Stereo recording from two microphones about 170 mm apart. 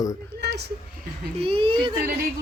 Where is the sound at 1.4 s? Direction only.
30° right (ahead or behind).